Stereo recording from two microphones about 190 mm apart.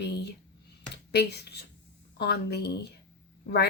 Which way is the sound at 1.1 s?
60° left (ahead or behind).